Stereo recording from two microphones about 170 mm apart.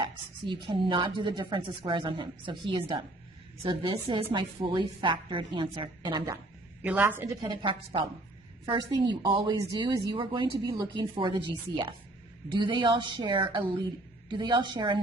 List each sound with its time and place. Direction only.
0.0 s a woman's voice: 30° right (ahead or behind)
6.8 s a woman's voice: 10° right (ahead or behind)
7.6 s a woman's voice: 30° right (ahead or behind)